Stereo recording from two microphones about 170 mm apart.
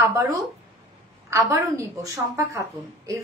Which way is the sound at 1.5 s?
20° right (ahead or behind).